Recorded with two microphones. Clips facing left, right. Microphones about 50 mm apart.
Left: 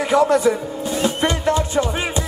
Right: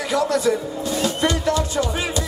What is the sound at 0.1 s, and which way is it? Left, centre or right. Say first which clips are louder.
Speech: left 5 dB; left.